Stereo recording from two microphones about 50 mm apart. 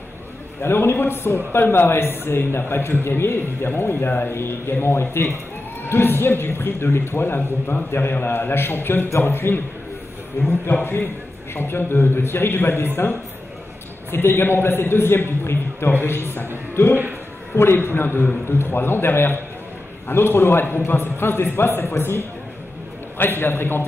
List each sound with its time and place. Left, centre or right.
0.6 s a man's voice: left
10.7 s a man's voice: left
14.1 s a man's voice: left
17.7 s a man's voice: left
23.1 s a man's voice: left